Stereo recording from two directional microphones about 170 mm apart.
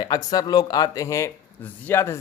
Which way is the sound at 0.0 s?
25° left (ahead or behind).